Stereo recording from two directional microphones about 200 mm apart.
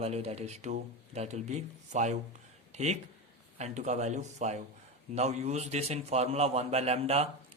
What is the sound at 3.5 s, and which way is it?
Speech, 35° right (ahead or behind).